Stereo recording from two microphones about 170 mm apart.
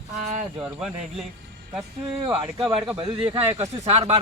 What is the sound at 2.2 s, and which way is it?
Speech, 30° right (ahead or behind).